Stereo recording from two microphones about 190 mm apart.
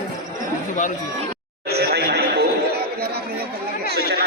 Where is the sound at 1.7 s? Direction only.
55° right (ahead or behind).